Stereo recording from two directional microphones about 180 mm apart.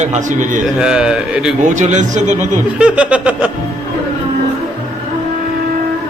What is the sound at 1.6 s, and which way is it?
Speech, 45° right (ahead or behind).